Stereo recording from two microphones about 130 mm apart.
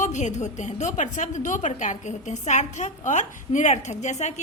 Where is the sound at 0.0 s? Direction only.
65° left (ahead or behind).